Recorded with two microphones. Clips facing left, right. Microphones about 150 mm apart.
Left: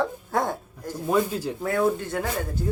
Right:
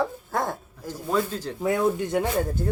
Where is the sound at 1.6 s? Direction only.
15° right (ahead or behind).